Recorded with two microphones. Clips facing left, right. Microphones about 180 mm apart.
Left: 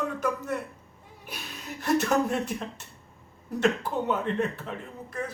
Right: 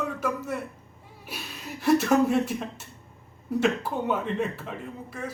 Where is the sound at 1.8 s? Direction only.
5° right (ahead or behind).